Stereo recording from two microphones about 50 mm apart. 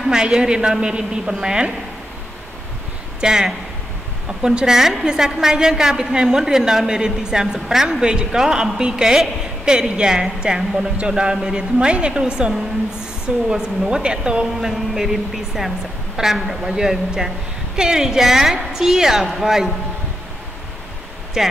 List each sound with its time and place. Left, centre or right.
0.1 s a woman's voice: centre
3.2 s a woman's voice: centre